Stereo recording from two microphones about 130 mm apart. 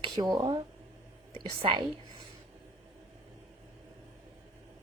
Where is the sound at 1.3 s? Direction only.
45° right (ahead or behind).